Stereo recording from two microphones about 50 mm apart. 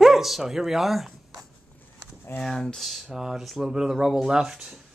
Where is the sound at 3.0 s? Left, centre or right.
Centre.